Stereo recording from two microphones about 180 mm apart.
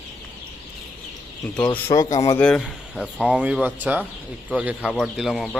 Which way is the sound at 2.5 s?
Centre (ahead or behind).